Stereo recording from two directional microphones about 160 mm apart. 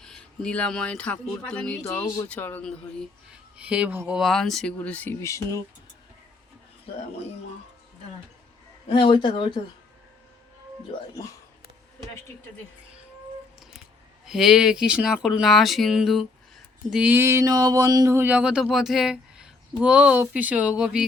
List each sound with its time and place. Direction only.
0.0 s speech: 5° left (ahead or behind)
3.6 s speech: 10° right (ahead or behind)
4.2 s speech: centre (ahead or behind); by 5.6 s 20° left (ahead or behind)
8.9 s speech: 30° left (ahead or behind)
14.3 s speech: 5° right (ahead or behind)